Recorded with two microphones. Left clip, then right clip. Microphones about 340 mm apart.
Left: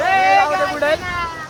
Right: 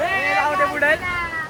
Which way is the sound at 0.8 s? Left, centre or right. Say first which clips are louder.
Even; centre.